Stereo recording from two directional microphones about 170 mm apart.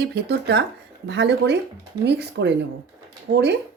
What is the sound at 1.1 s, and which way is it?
A woman's voice, 90° right.